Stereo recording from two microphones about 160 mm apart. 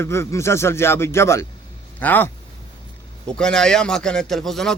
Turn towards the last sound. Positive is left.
turn(degrees=0)  # may be behind; listen again after turning